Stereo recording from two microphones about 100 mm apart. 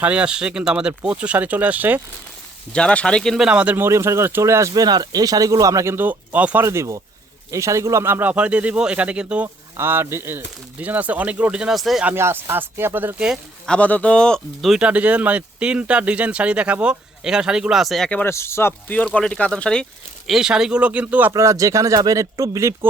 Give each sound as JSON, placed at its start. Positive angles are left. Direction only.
{"t": 0.0, "sound": "speech", "side_deg": -10}
{"t": 2.7, "sound": "speech", "side_deg": 10}
{"t": 3.3, "sound": "speech", "side_deg": -10}
{"t": 3.8, "sound": "speech", "side_deg": -30}
{"t": 4.7, "sound": "speech", "side_deg": -40}
{"t": 6.7, "sound": "speech", "side_deg": -30}
{"t": 9.7, "sound": "speech", "side_deg": -25}
{"t": 12.0, "sound": "speech", "side_deg": -25}
{"t": 13.7, "sound": "speech", "side_deg": 15}
{"t": 14.7, "sound": "speech", "side_deg": -10}
{"t": 18.2, "sound": "speech", "side_deg": 25}
{"t": 19.0, "sound": "speech", "side_deg": 10}
{"t": 21.3, "sound": "speech", "side_deg": -30}